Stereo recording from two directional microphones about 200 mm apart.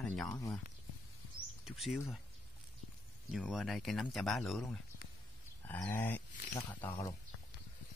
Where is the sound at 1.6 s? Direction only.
Centre (ahead or behind).